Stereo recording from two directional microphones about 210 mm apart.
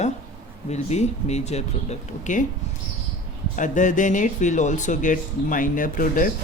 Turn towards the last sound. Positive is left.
turn(degrees=40)  # may be behind; listen again after turning